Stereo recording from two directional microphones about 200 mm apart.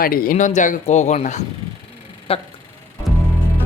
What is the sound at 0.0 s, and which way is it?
Speech, 45° left (ahead or behind).